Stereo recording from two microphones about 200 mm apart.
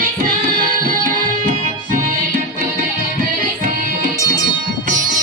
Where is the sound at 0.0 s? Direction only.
45° right (ahead or behind).